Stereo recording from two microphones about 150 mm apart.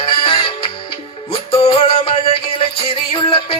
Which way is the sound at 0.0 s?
35° left (ahead or behind).